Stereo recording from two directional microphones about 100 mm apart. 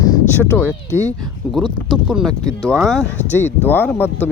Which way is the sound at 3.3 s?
20° left (ahead or behind).